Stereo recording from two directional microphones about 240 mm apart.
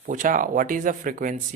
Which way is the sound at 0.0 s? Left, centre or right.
Right.